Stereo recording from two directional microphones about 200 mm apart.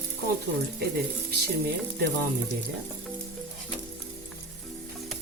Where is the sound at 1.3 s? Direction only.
55° right (ahead or behind).